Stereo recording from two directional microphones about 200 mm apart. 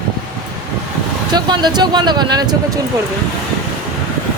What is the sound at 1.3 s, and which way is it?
Speech, 20° right (ahead or behind).